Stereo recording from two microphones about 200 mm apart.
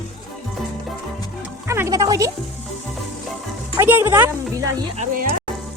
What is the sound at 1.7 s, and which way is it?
Speech, 15° right (ahead or behind).